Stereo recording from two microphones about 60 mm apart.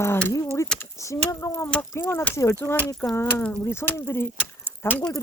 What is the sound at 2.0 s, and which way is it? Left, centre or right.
Speech, left.